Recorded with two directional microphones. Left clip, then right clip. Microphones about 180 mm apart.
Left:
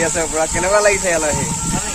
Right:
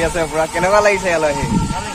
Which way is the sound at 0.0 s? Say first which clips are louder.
Right 1 dB; 20° right (ahead or behind).